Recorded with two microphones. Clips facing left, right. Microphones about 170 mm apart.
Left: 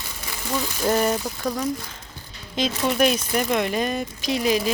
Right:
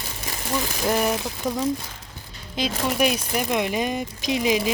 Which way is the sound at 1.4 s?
Centre (ahead or behind).